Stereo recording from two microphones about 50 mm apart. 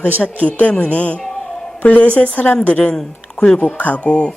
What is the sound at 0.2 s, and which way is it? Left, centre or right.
A woman's voice, left.